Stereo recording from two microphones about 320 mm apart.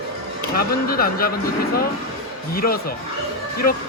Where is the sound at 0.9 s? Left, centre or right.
Left.